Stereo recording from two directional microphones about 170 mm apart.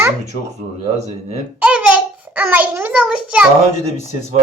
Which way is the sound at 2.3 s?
10° right (ahead or behind).